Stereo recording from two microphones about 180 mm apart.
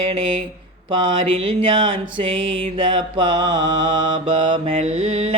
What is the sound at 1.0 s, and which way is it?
Mantra, 30° right (ahead or behind).